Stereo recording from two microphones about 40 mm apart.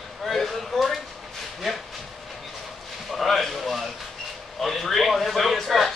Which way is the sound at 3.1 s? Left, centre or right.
Centre.